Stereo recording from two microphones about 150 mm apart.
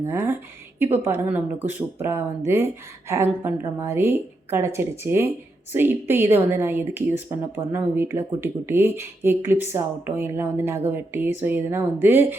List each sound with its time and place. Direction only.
0.0 s a woman's voice: 15° right (ahead or behind)